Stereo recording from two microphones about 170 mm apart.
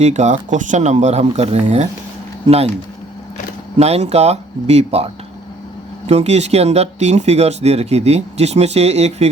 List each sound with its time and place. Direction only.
0.0 s speech: 45° right (ahead or behind)
3.8 s speech: 40° right (ahead or behind)